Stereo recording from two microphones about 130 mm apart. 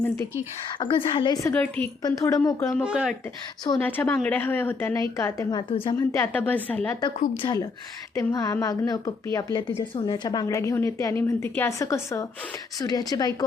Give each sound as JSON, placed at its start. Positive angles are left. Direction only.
{"t": 0.8, "sound": "a woman's voice", "side_deg": 40}
{"t": 1.5, "sound": "speech", "side_deg": 10}
{"t": 2.0, "sound": "a woman's voice", "side_deg": 25}
{"t": 2.6, "sound": "speech", "side_deg": 15}
{"t": 2.8, "sound": "speech", "side_deg": -5}
{"t": 3.8, "sound": "a woman's voice", "side_deg": 15}
{"t": 6.0, "sound": "speech", "side_deg": 20}
{"t": 7.4, "sound": "a woman's voice", "side_deg": 30}